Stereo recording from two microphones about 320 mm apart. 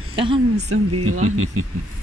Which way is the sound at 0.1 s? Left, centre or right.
Centre.